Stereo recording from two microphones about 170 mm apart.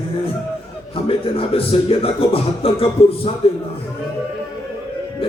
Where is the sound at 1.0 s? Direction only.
35° left (ahead or behind).